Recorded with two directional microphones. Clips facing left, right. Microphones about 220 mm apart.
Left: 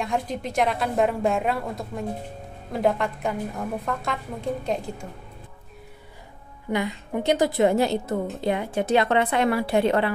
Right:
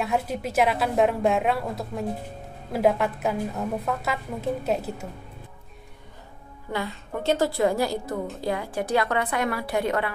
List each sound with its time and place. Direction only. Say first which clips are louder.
0.0 s a woman's voice: right 1 dB; 5° right (ahead or behind)
6.7 s a woman's voice: left 4 dB; 15° left (ahead or behind)